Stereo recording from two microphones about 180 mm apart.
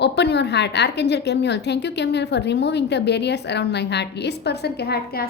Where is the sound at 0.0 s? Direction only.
70° left (ahead or behind).